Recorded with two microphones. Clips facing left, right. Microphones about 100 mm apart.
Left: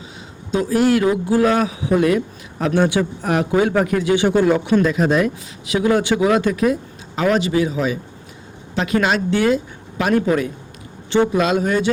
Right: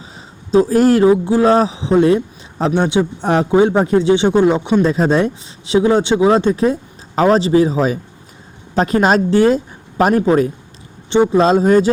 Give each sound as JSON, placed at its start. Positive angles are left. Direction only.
{"t": 0.5, "sound": "speech", "side_deg": -35}
{"t": 1.0, "sound": "a man's voice", "side_deg": -25}
{"t": 11.1, "sound": "speech", "side_deg": -25}